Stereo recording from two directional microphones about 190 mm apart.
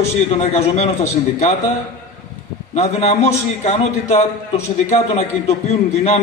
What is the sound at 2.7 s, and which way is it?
A man's voice, 35° left (ahead or behind).